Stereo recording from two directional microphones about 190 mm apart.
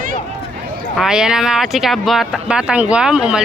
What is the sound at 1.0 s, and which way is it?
Speech, 5° right (ahead or behind).